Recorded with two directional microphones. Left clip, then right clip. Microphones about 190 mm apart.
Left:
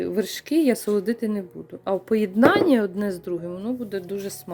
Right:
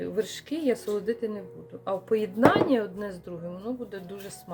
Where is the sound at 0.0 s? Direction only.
45° left (ahead or behind).